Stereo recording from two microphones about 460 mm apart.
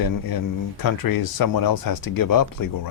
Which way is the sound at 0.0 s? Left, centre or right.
Left.